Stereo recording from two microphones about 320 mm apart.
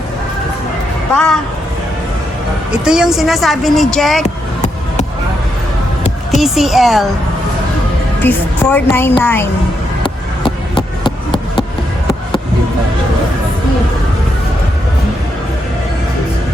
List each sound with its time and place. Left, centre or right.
1.1 s speech: centre
2.7 s speech: centre
6.3 s speech: centre
8.2 s a woman's voice: centre
10.0 s a sound: centre